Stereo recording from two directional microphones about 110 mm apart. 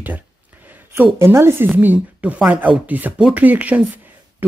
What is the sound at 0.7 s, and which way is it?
A woman's voice, 15° right (ahead or behind).